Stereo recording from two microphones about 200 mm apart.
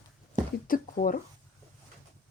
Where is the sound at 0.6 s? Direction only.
45° left (ahead or behind).